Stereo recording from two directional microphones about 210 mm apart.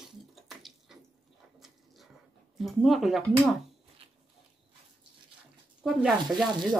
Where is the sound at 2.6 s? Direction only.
Centre (ahead or behind).